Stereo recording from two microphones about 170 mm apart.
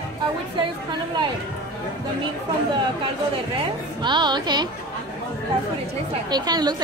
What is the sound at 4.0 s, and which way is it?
Speech, 25° right (ahead or behind).